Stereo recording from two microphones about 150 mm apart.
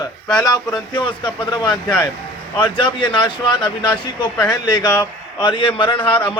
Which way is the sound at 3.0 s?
35° left (ahead or behind).